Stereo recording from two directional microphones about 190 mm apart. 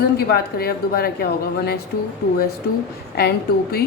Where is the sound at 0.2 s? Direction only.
55° left (ahead or behind).